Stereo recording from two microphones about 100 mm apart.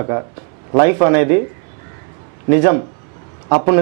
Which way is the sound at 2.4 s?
15° right (ahead or behind).